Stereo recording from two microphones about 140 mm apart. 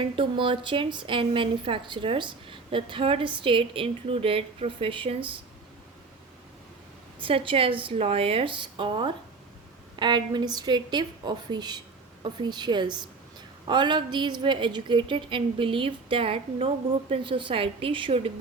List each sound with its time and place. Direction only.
0.2 s a woman's voice: 35° right (ahead or behind)
7.2 s a woman's voice: 40° right (ahead or behind)